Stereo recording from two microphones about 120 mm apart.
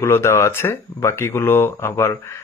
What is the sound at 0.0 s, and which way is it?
Speech, 20° left (ahead or behind).